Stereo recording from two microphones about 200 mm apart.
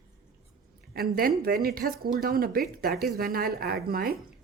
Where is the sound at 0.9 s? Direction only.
50° right (ahead or behind).